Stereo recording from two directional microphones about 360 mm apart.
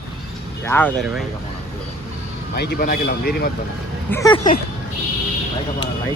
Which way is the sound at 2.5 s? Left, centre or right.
Left.